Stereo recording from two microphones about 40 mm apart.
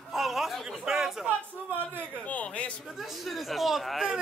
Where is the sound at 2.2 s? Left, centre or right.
Left.